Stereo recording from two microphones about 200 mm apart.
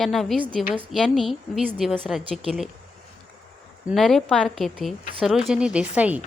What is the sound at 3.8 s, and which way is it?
A woman's voice, centre (ahead or behind).